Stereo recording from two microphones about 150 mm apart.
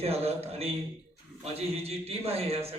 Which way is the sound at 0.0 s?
45° right (ahead or behind).